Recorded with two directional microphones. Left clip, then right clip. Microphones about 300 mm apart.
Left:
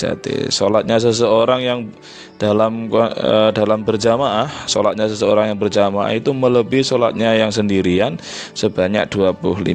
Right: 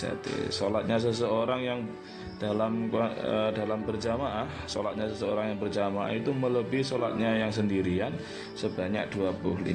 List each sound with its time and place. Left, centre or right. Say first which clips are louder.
0.0 s a man's voice: left 12 dB; left